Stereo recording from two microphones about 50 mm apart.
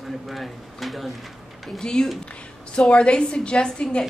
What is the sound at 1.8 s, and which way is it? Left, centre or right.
A woman's voice, centre.